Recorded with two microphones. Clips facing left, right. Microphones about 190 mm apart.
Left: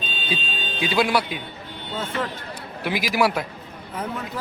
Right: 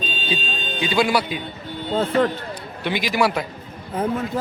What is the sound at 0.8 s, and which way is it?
Speech, centre (ahead or behind).